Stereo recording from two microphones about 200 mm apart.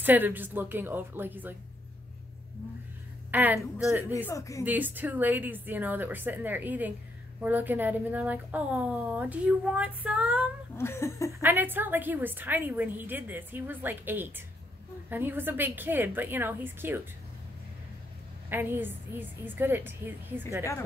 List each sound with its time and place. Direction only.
0.0 s a woman's voice: 10° right (ahead or behind)
3.3 s a woman's voice: 10° right (ahead or behind)
4.3 s laughter: 15° left (ahead or behind)
4.6 s a woman's voice: 10° right (ahead or behind)
10.8 s laughter: 15° left (ahead or behind)
11.4 s a woman's voice: 10° right (ahead or behind)
18.5 s a woman's voice: 10° right (ahead or behind)